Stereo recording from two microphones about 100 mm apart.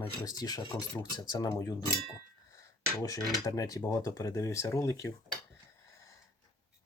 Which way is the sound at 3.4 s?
35° left (ahead or behind).